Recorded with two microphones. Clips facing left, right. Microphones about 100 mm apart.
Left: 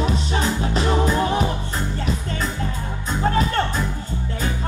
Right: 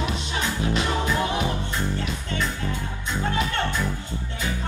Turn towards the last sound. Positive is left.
turn(degrees=35)  # may be behind; listen again after turning